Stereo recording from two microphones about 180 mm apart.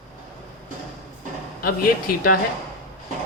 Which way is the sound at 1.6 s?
55° left (ahead or behind).